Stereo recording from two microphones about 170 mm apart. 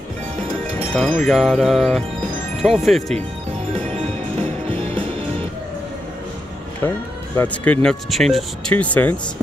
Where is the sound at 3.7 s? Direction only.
40° right (ahead or behind).